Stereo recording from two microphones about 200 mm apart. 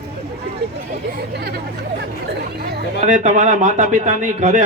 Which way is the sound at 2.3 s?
55° right (ahead or behind).